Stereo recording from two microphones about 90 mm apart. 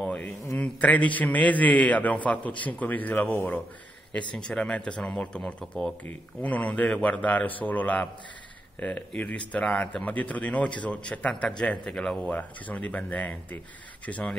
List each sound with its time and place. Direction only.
0.0 s a sound: 15° left (ahead or behind)
0.6 s a man's voice: 15° left (ahead or behind)
6.0 s a man's voice: 15° left (ahead or behind)